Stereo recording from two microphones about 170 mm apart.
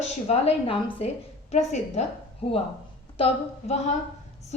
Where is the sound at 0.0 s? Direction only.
40° left (ahead or behind).